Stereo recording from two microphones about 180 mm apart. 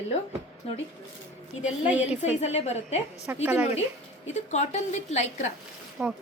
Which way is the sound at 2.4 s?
35° left (ahead or behind).